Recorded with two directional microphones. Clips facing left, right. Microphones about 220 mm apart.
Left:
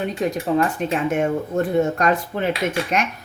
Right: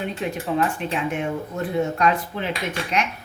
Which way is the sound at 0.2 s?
40° left (ahead or behind).